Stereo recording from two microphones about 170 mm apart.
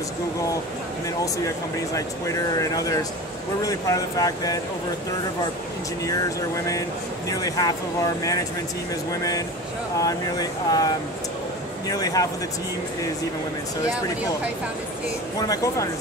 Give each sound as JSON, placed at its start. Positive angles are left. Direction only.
{"t": 2.0, "sound": "speech", "side_deg": 20}
{"t": 6.0, "sound": "speech", "side_deg": 20}
{"t": 9.9, "sound": "speech", "side_deg": 20}
{"t": 11.9, "sound": "speech", "side_deg": 20}
{"t": 15.3, "sound": "speech", "side_deg": 20}